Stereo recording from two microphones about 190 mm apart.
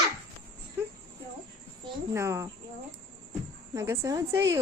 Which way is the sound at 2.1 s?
15° right (ahead or behind).